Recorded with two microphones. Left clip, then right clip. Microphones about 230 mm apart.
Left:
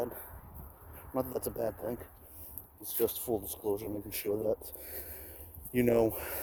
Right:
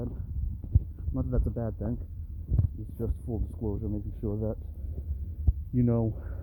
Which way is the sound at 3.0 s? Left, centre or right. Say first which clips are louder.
Left 6 dB; left.